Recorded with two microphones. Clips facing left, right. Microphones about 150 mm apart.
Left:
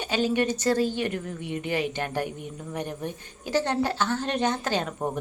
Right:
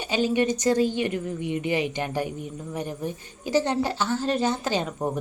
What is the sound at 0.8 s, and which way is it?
Speech, 50° left (ahead or behind).